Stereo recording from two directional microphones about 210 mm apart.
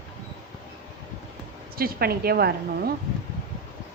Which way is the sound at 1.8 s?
45° right (ahead or behind).